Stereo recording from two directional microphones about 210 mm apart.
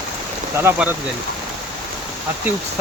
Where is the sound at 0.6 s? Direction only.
10° right (ahead or behind).